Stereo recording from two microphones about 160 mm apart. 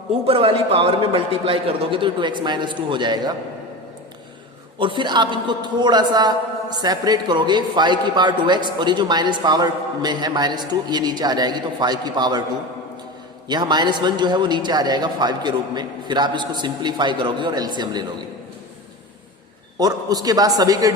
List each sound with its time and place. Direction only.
0.1 s a man's voice: 35° right (ahead or behind)
4.8 s a man's voice: 30° right (ahead or behind)
13.5 s a man's voice: 25° right (ahead or behind)
19.8 s a man's voice: 25° right (ahead or behind)